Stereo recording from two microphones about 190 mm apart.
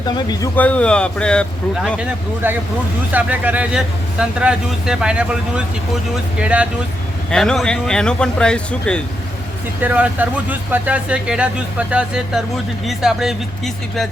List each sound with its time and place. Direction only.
0.3 s speech: 15° left (ahead or behind)
2.0 s speech: 10° right (ahead or behind)
9.8 s speech: 10° right (ahead or behind)